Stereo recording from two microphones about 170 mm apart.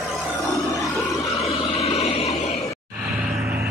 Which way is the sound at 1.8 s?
35° left (ahead or behind).